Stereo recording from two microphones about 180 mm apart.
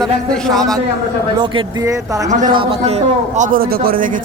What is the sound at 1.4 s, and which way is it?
Speech, 25° right (ahead or behind).